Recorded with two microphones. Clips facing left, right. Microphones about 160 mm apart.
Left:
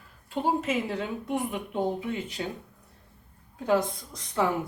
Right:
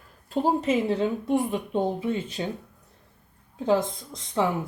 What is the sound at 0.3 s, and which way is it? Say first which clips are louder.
Speech: right 3 dB; 40° right (ahead or behind).